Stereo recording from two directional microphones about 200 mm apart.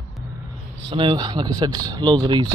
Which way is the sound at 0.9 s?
25° right (ahead or behind).